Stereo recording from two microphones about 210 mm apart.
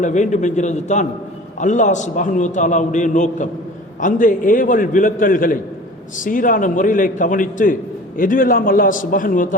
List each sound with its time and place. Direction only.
0.0 s a man's voice: 35° left (ahead or behind)